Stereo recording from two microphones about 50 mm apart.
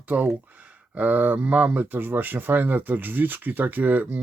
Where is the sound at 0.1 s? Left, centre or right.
Right.